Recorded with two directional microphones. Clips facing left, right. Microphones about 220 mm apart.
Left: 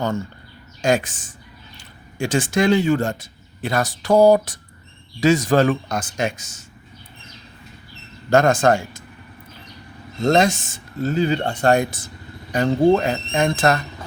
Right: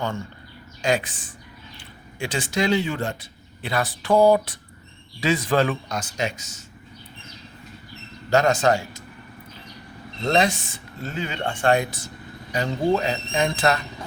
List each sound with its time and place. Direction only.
0.8 s speech: 45° left (ahead or behind)
8.3 s speech: 50° left (ahead or behind)
10.2 s speech: 45° left (ahead or behind)